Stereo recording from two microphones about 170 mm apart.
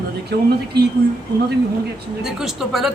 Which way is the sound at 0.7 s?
75° right (ahead or behind).